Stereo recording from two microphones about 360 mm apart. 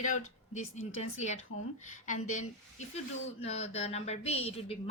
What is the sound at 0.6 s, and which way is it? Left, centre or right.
Speech, left.